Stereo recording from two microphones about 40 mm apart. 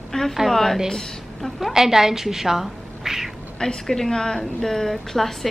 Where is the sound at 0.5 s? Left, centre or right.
Centre.